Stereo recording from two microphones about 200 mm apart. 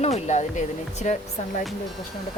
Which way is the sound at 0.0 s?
35° left (ahead or behind).